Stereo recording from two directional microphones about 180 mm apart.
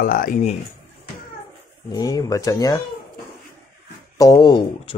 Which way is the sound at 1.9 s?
20° left (ahead or behind).